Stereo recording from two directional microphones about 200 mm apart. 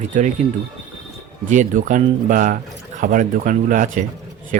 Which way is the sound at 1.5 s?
40° right (ahead or behind).